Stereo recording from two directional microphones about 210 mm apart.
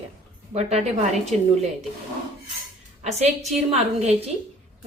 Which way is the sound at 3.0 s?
30° right (ahead or behind).